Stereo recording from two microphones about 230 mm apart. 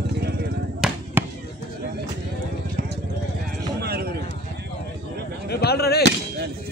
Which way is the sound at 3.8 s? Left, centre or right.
Right.